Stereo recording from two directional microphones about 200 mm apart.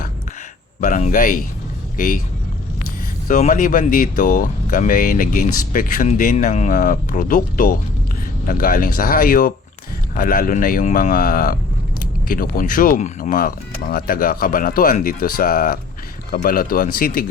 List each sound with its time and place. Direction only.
0.8 s speech: 40° left (ahead or behind)
3.2 s speech: 40° left (ahead or behind)